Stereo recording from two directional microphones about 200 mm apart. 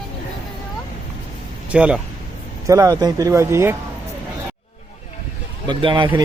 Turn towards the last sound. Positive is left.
turn(degrees=-25)  # may be behind; listen again after turning